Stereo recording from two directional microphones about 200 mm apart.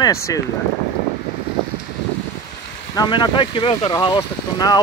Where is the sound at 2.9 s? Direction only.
20° left (ahead or behind).